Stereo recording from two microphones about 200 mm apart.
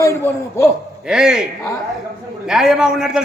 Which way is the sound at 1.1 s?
5° right (ahead or behind).